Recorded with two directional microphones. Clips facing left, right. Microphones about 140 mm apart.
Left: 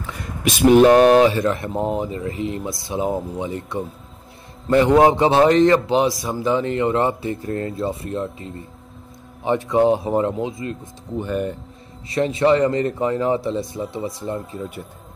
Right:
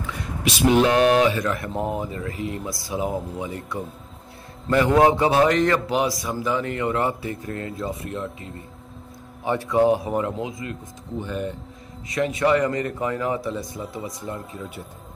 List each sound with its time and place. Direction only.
0.5 s a man's voice: 50° left (ahead or behind); by 10.8 s 30° left (ahead or behind)
11.1 s speech: 55° left (ahead or behind)
12.1 s a man's voice: 30° left (ahead or behind)